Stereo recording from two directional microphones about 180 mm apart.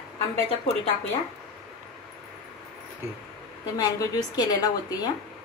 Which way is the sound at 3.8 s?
20° left (ahead or behind).